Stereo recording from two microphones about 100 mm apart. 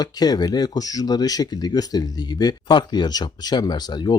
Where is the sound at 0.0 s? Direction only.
40° left (ahead or behind).